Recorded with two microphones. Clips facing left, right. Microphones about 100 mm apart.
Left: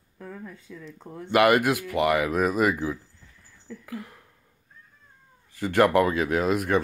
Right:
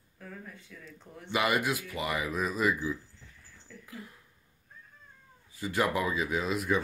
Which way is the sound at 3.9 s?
65° left (ahead or behind).